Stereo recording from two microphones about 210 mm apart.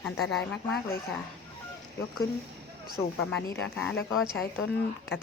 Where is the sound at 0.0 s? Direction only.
Centre (ahead or behind).